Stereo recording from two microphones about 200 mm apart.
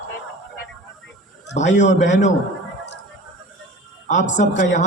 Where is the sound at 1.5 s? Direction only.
35° left (ahead or behind).